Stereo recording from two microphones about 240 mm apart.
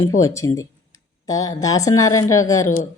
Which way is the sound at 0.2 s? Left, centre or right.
Centre.